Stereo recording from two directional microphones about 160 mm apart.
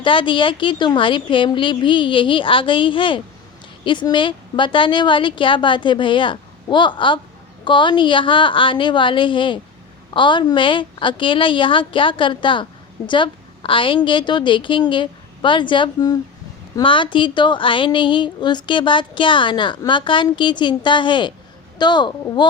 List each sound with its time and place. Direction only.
0.0 s a woman's voice: 30° left (ahead or behind)